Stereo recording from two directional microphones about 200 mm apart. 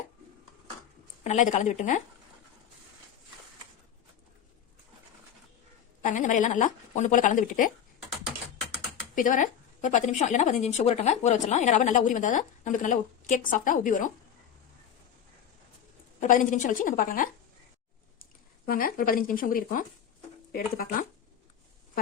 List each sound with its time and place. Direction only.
1.2 s a woman's voice: 35° left (ahead or behind)
6.0 s a woman's voice: 40° left (ahead or behind)
9.1 s a woman's voice: 40° left (ahead or behind)
16.2 s a woman's voice: 40° left (ahead or behind)
18.6 s speech: 45° left (ahead or behind)